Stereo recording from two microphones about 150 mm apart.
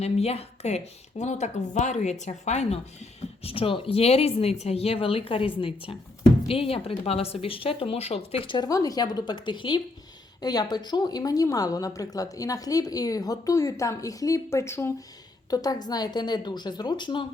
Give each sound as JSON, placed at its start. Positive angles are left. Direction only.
{"t": 0.0, "sound": "a woman's voice", "side_deg": 45}